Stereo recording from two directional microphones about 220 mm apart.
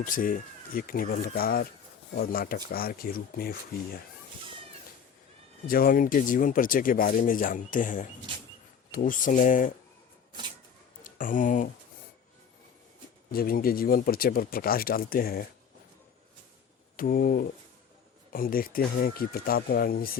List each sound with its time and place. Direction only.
0.0 s speech: 40° left (ahead or behind)
5.6 s speech: 40° left (ahead or behind)
11.0 s speech: 35° left (ahead or behind)
13.3 s speech: 40° left (ahead or behind)
17.0 s speech: 40° left (ahead or behind)